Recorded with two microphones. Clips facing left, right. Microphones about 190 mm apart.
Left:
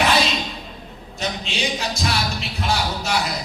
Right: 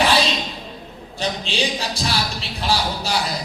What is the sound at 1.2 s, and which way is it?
Speech, 30° right (ahead or behind).